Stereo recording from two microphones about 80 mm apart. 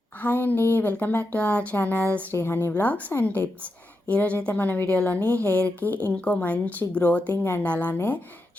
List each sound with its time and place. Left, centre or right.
0.2 s a woman's voice: left